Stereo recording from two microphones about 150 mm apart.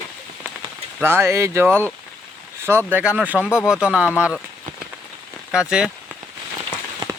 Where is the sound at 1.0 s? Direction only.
15° right (ahead or behind).